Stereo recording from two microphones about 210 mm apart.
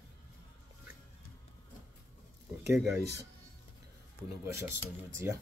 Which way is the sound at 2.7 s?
15° right (ahead or behind).